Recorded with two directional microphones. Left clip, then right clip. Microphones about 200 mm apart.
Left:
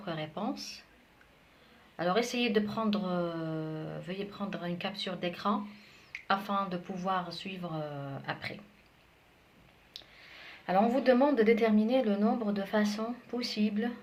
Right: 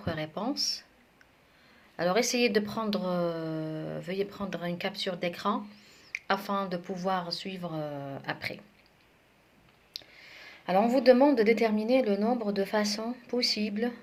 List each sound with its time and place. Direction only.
0.0 s speech: 40° right (ahead or behind)
2.0 s speech: 40° right (ahead or behind)
9.9 s a sound: 35° right (ahead or behind)
10.7 s speech: 35° right (ahead or behind)